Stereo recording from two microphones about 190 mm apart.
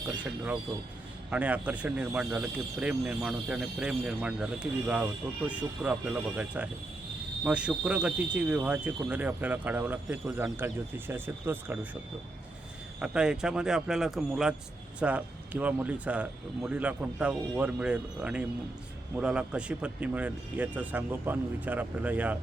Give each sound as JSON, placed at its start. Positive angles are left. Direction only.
{"t": 1.3, "sound": "speech", "side_deg": -5}
{"t": 13.0, "sound": "speech", "side_deg": -5}